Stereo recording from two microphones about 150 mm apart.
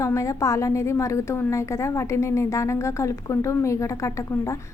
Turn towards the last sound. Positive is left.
turn(degrees=20)  # may be behind; listen again after turning